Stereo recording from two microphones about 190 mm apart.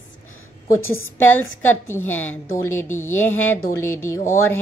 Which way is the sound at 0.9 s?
15° left (ahead or behind).